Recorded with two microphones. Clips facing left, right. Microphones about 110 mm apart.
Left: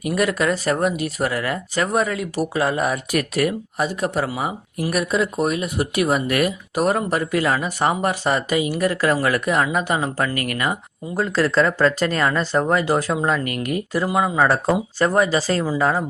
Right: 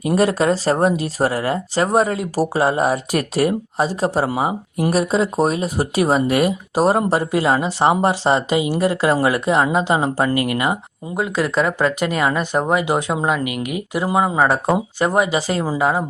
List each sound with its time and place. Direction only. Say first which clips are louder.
0.0 s speech: right 4 dB; 30° right (ahead or behind); by 16.0 s 15° right (ahead or behind)